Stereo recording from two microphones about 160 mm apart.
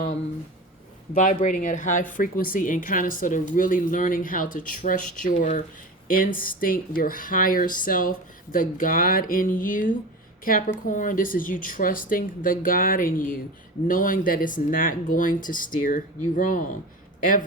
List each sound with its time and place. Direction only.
1.1 s a woman's voice: 55° left (ahead or behind)